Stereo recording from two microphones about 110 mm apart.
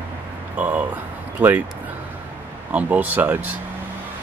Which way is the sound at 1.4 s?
15° right (ahead or behind).